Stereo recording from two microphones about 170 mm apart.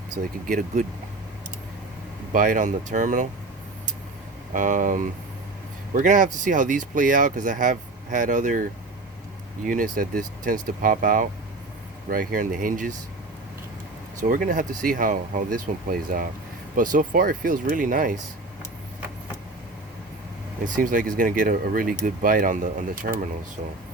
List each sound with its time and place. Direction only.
0.2 s speech: 50° right (ahead or behind)
2.3 s speech: 50° right (ahead or behind)
4.5 s speech: 50° right (ahead or behind)
9.6 s speech: 55° right (ahead or behind)
14.2 s speech: 55° right (ahead or behind)
20.7 s speech: 50° right (ahead or behind)